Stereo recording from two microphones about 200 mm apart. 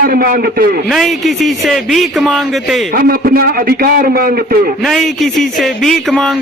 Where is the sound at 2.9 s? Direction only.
45° right (ahead or behind).